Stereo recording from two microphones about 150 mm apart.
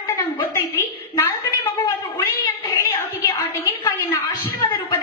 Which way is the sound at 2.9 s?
15° left (ahead or behind).